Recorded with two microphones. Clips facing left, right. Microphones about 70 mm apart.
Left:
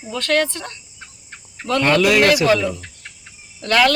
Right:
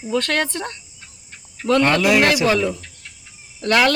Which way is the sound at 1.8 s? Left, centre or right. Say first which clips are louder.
Left 1 dB; centre.